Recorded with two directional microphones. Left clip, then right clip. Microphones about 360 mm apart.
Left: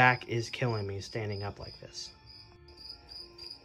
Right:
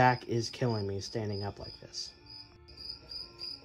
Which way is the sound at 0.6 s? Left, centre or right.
Right.